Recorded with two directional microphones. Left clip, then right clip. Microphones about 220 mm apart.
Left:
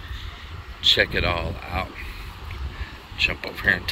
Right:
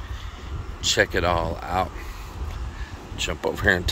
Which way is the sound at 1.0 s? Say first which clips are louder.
Right 1 dB; 20° right (ahead or behind).